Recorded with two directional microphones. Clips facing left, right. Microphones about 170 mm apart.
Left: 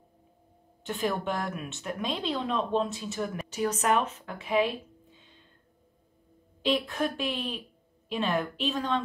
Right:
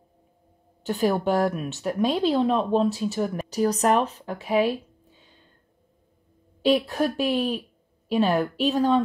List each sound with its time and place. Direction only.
0.8 s speech: 40° right (ahead or behind)
6.6 s speech: 40° right (ahead or behind)